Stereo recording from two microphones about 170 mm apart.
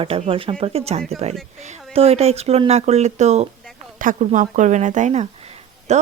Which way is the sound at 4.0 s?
50° right (ahead or behind).